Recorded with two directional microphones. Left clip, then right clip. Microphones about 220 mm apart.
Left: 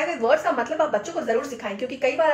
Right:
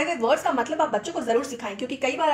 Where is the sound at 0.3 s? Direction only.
35° right (ahead or behind).